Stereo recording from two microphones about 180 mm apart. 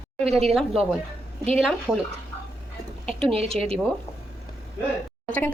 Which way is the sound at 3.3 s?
35° right (ahead or behind).